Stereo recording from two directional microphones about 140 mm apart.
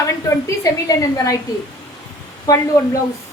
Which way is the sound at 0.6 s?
25° left (ahead or behind).